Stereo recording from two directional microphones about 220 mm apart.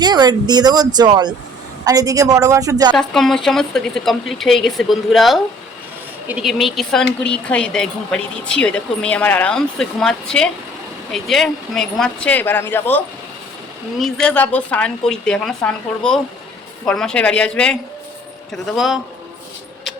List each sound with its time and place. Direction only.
0.0 s a woman's voice: 20° right (ahead or behind)
2.9 s speech: centre (ahead or behind)